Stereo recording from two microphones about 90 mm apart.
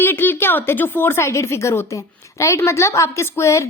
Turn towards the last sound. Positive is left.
turn(degrees=35)  # may be behind; listen again after turning